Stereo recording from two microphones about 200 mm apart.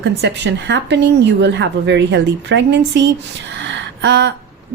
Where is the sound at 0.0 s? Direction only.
60° right (ahead or behind).